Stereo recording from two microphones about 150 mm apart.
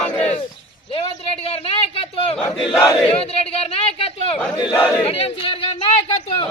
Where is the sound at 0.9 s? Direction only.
40° left (ahead or behind).